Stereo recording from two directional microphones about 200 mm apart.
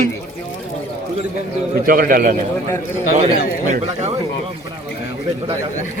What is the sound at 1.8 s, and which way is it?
Speech, 50° right (ahead or behind).